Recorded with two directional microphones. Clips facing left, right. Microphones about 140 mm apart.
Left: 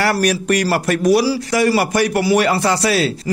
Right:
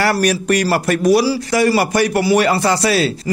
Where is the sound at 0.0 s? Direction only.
35° right (ahead or behind).